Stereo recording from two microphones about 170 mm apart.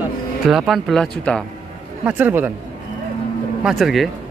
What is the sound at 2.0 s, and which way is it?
Speech, 10° right (ahead or behind).